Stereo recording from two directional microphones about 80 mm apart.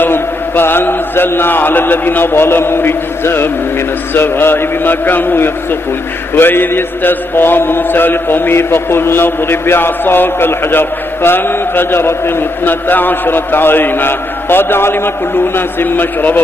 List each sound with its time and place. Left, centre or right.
0.0 s chant: left
4.1 s mantra: left